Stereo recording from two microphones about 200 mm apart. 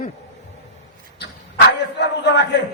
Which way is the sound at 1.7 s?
60° left (ahead or behind).